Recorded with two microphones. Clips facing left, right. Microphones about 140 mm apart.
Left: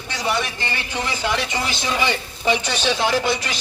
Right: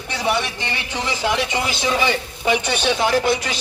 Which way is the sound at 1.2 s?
15° right (ahead or behind).